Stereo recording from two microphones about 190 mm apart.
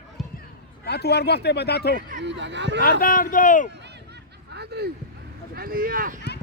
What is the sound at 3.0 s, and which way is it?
Speech, 45° left (ahead or behind).